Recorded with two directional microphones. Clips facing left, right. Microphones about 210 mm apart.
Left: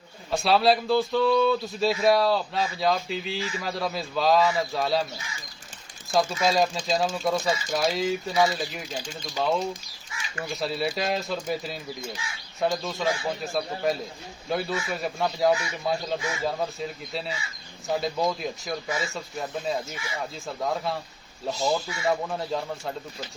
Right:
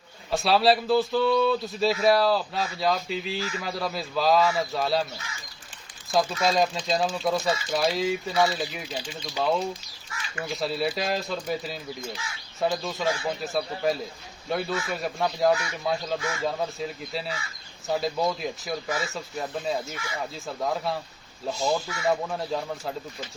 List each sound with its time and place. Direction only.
0.3 s speech: centre (ahead or behind)
6.4 s speech: centre (ahead or behind)